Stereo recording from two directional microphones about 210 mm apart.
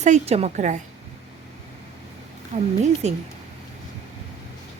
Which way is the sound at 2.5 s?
35° right (ahead or behind).